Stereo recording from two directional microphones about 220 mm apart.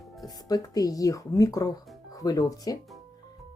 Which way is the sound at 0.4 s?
15° left (ahead or behind).